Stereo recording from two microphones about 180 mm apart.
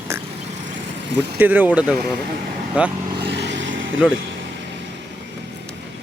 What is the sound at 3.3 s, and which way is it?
Vehicle, 75° right (ahead or behind).